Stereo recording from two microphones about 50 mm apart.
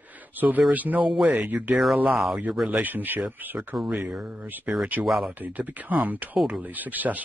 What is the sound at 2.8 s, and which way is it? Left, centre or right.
Speech, right.